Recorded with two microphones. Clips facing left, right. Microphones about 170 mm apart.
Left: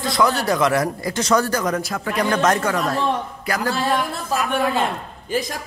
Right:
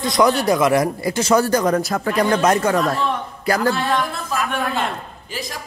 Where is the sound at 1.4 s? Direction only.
35° right (ahead or behind).